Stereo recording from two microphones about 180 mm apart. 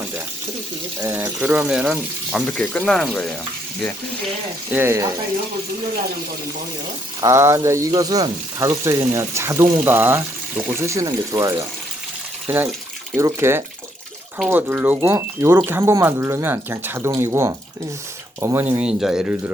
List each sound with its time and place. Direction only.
1.0 s speech: 10° right (ahead or behind)
4.7 s speech: 10° right (ahead or behind)
7.2 s speech: 15° right (ahead or behind)